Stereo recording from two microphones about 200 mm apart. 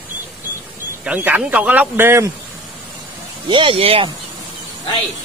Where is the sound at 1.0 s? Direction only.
10° right (ahead or behind).